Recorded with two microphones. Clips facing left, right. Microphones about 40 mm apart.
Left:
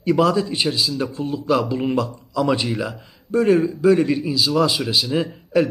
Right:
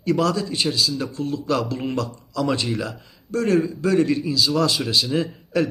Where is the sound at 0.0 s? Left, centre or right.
Centre.